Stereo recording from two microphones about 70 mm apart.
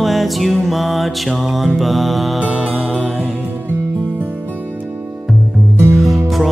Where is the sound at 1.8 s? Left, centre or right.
Centre.